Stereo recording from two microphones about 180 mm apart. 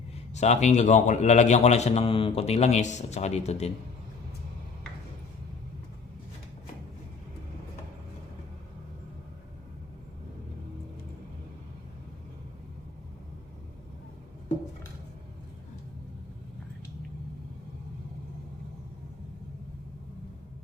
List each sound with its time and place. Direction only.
0.3 s a man's voice: 40° left (ahead or behind)